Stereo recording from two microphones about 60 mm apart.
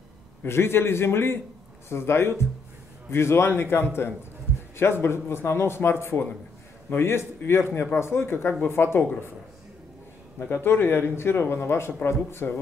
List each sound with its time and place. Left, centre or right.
0.5 s speech: left
4.5 s a sound: left
5.0 s speech: left
10.4 s speech: left